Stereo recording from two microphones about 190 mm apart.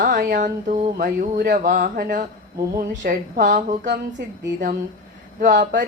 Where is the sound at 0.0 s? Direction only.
45° right (ahead or behind).